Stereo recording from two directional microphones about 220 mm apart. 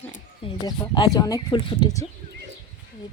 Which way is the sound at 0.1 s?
20° left (ahead or behind).